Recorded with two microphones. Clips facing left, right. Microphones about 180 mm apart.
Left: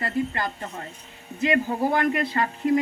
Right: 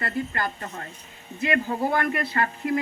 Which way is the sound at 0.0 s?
20° left (ahead or behind).